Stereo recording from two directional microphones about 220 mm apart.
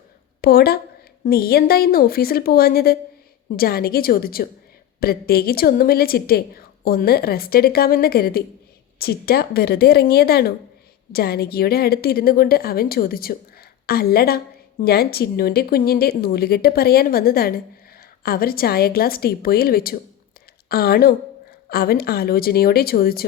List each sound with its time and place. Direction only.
0.4 s a woman's voice: 45° left (ahead or behind)